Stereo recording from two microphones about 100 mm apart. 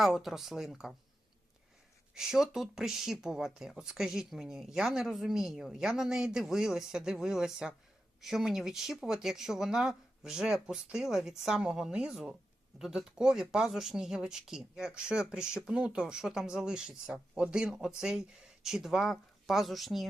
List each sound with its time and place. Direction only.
0.0 s speech: centre (ahead or behind)
2.1 s speech: 5° right (ahead or behind)